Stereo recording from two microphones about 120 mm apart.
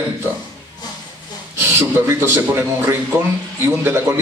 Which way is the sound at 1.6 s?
20° right (ahead or behind).